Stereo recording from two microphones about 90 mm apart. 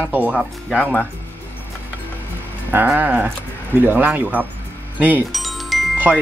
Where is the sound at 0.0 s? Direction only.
20° right (ahead or behind).